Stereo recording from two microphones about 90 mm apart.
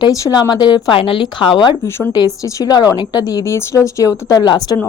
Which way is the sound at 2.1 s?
40° left (ahead or behind).